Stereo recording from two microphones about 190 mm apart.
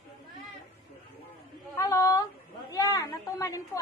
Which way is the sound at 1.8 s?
15° left (ahead or behind).